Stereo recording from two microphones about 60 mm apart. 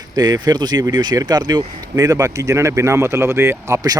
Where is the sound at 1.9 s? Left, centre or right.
Right.